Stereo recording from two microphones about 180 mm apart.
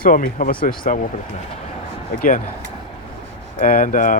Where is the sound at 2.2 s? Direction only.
50° left (ahead or behind).